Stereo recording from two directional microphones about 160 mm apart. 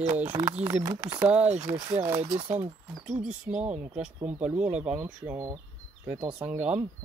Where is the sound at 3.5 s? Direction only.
50° right (ahead or behind).